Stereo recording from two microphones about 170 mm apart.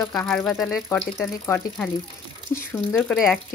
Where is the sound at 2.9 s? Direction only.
Centre (ahead or behind).